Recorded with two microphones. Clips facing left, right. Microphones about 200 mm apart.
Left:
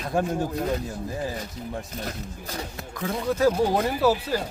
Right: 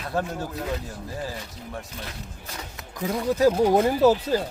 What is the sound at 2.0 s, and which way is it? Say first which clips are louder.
Speech: left 5 dB; 35° left (ahead or behind).